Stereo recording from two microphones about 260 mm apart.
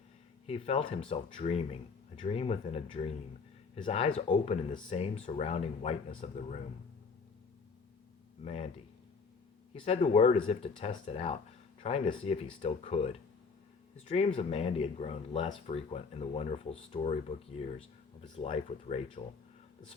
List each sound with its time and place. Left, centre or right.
0.4 s speech: left
8.4 s speech: left
9.7 s speech: left